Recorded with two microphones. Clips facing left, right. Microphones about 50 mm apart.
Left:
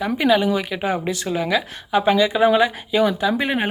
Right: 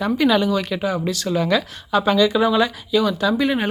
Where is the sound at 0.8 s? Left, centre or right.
Left.